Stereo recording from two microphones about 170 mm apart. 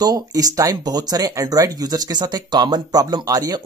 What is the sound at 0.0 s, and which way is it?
Speech, 20° right (ahead or behind).